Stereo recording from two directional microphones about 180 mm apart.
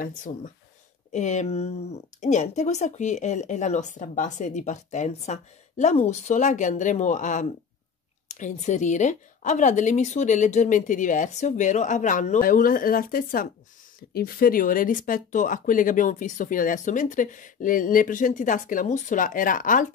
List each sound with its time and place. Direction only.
1.1 s speech: 40° left (ahead or behind)